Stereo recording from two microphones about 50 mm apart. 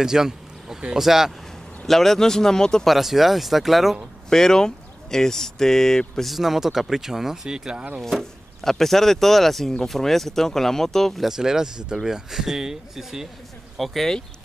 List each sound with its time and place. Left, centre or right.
0.0 s speech: centre
1.9 s speech: centre
2.9 s speech: centre
4.3 s speech: centre
6.3 s speech: centre
8.0 s speech: centre
11.2 s speech: centre